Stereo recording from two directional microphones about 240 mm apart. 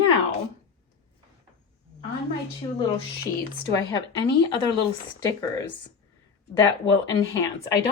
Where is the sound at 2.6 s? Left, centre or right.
Centre.